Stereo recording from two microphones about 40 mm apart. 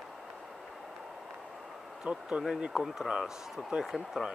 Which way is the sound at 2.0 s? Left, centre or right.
Right.